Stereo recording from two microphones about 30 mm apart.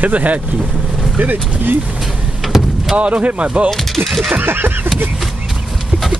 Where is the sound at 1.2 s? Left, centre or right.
Right.